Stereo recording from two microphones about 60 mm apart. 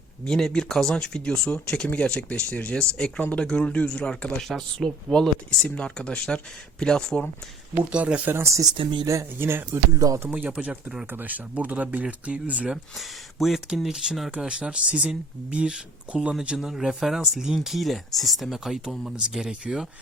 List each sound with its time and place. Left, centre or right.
0.3 s speech: centre
7.8 s speech: centre
8.2 s speech: right
10.2 s speech: right
11.1 s speech: right
12.7 s speech: centre
14.3 s speech: centre